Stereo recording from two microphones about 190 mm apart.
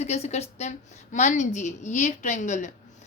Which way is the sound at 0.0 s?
35° left (ahead or behind).